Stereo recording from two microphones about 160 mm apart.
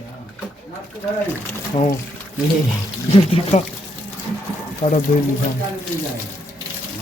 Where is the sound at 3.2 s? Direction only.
40° left (ahead or behind).